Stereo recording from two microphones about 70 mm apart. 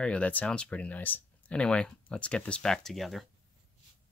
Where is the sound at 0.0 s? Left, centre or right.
Centre.